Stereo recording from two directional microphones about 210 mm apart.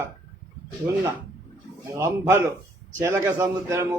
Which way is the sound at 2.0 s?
10° right (ahead or behind).